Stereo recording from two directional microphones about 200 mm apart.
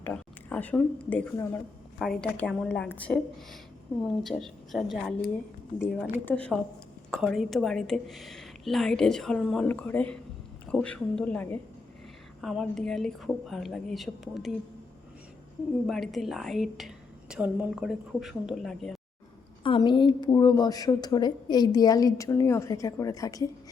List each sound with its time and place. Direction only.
0.0 s a woman's voice: 10° left (ahead or behind)
15.9 s a woman's voice: centre (ahead or behind)
19.6 s a woman's voice: 25° left (ahead or behind)